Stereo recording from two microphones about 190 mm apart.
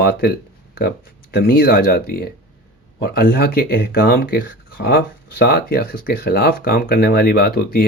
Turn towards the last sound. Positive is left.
turn(degrees=55)  # may be behind; listen again after turning